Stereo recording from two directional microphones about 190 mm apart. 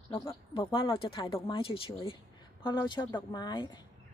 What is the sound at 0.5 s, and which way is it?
A woman's voice, 25° left (ahead or behind).